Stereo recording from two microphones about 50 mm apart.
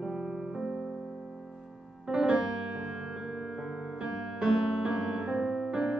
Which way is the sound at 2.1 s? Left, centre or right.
Centre.